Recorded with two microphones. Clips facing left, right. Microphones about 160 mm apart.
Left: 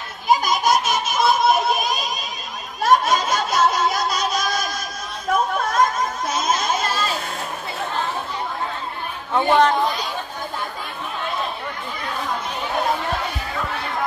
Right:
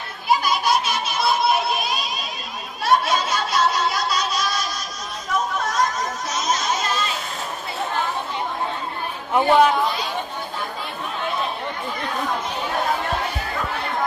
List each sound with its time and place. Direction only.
0.3 s a sound: 45° left (ahead or behind)
5.3 s chatter: 55° left (ahead or behind)
9.3 s speech: 10° right (ahead or behind)